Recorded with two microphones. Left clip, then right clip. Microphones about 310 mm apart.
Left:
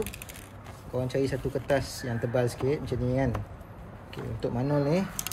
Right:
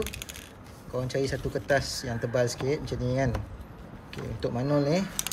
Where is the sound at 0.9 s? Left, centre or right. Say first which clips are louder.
Left 1 dB; centre.